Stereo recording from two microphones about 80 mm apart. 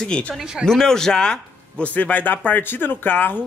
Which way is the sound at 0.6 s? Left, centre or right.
Centre.